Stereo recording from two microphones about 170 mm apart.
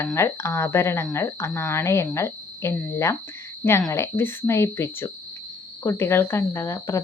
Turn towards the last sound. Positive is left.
turn(degrees=15)  # may be behind; listen again after turning